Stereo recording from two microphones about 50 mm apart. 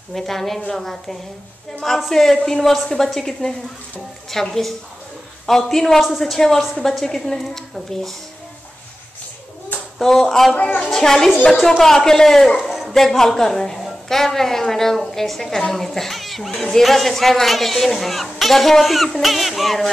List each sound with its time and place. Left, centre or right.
0.1 s a woman's voice: centre
9.9 s a woman's voice: centre
10.5 s a woman's voice: left
10.9 s a woman's voice: centre